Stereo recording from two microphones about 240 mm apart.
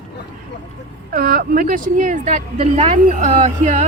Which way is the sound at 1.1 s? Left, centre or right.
Right.